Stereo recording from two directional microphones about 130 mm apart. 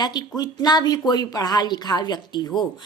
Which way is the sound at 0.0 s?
30° left (ahead or behind).